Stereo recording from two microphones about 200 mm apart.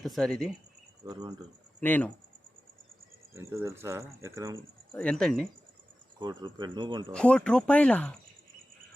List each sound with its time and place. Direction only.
0.0 s speech: 5° left (ahead or behind)
1.0 s speech: 20° right (ahead or behind)
1.8 s speech: 10° left (ahead or behind)
3.3 s speech: 15° right (ahead or behind)
4.9 s speech: 5° left (ahead or behind)
6.1 s speech: 20° right (ahead or behind)
7.1 s speech: 5° left (ahead or behind)